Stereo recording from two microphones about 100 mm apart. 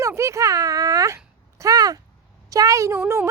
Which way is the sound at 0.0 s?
30° right (ahead or behind).